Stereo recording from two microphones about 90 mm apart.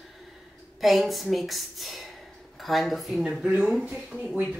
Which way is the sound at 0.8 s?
Centre (ahead or behind).